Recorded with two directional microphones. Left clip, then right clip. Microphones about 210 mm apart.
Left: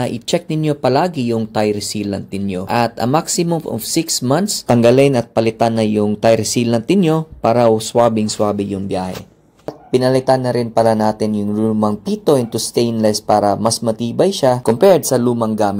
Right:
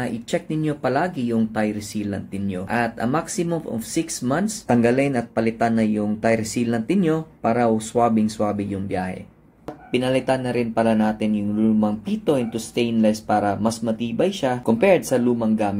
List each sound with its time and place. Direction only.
0.0 s speech: 40° left (ahead or behind)